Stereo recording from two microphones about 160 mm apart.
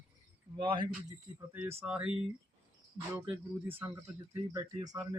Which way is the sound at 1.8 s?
10° right (ahead or behind).